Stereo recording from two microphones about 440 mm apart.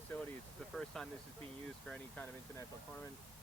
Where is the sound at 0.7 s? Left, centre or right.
Centre.